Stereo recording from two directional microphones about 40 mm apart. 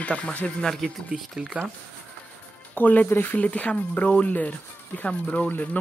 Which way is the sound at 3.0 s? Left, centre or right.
Left.